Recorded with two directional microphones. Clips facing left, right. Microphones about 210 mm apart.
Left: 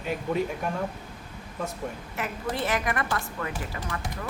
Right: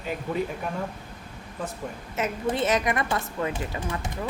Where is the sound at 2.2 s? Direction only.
20° right (ahead or behind).